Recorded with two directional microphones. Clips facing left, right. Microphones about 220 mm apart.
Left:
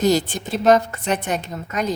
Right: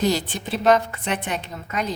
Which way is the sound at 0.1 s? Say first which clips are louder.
Left 5 dB; 45° left (ahead or behind).